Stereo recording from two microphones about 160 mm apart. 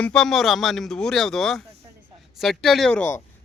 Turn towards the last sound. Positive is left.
turn(degrees=5)  # may be behind; listen again after turning